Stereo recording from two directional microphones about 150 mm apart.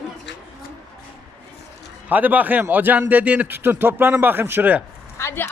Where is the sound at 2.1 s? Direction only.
10° right (ahead or behind).